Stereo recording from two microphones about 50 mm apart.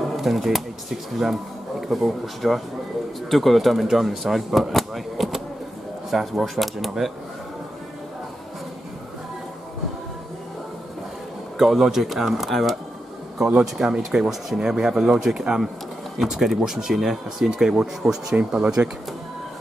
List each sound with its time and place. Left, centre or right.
0.2 s speech: centre
11.5 s speech: centre
13.6 s speech: centre